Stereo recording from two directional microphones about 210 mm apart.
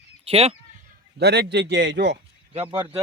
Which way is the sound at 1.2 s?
50° right (ahead or behind).